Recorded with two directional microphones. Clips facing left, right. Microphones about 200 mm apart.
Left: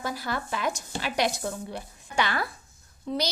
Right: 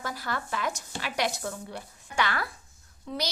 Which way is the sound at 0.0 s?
10° left (ahead or behind).